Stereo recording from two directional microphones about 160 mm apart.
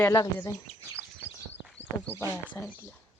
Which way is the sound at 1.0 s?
15° right (ahead or behind).